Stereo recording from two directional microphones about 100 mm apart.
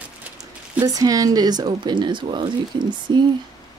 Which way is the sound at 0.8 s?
35° right (ahead or behind).